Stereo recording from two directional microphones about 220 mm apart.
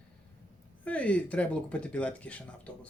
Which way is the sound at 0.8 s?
5° left (ahead or behind).